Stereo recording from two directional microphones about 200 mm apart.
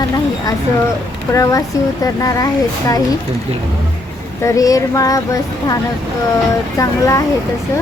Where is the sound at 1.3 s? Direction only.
15° left (ahead or behind).